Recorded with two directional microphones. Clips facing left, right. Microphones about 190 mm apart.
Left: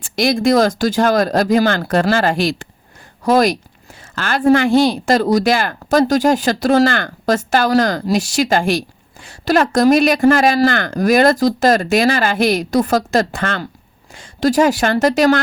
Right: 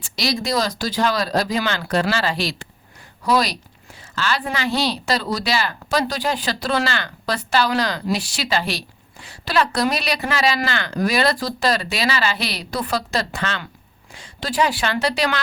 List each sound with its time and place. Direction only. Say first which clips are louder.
0.0 s speech: left 9 dB; 50° left (ahead or behind)